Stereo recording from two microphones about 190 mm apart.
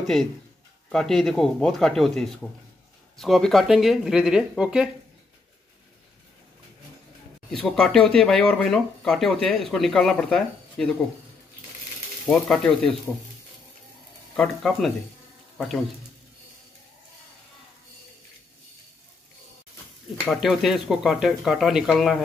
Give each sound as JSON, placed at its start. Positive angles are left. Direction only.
{"t": 0.0, "sound": "speech", "side_deg": 0}
{"t": 7.7, "sound": "speech", "side_deg": 5}
{"t": 12.3, "sound": "speech", "side_deg": 5}
{"t": 14.3, "sound": "speech", "side_deg": 0}
{"t": 20.2, "sound": "speech", "side_deg": 0}